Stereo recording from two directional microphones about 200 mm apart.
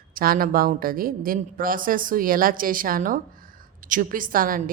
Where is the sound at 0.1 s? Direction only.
45° right (ahead or behind).